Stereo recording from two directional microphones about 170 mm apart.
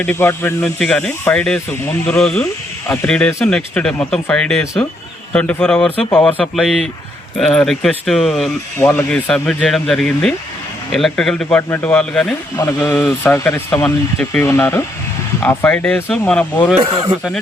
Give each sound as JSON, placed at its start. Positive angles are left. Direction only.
{"t": 0.0, "sound": "speech", "side_deg": 10}
{"t": 11.4, "sound": "speech", "side_deg": 15}
{"t": 16.8, "sound": "speech", "side_deg": -35}